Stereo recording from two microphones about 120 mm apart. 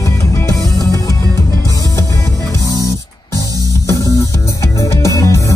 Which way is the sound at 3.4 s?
30° right (ahead or behind).